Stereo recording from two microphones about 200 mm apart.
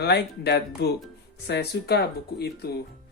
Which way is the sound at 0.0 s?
55° left (ahead or behind).